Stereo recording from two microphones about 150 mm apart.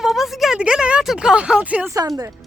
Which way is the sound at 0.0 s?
Centre (ahead or behind).